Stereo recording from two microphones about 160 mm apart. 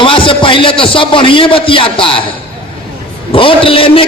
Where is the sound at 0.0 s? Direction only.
35° left (ahead or behind).